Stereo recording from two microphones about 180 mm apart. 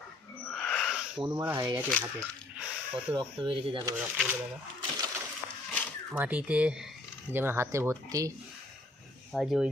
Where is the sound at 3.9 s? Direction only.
5° right (ahead or behind).